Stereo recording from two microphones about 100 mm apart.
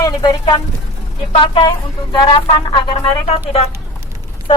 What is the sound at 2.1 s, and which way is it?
Music, 50° left (ahead or behind).